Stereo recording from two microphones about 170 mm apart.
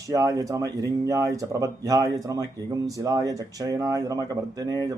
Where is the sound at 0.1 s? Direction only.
20° right (ahead or behind).